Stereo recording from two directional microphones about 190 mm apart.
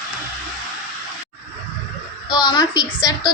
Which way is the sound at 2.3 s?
20° left (ahead or behind).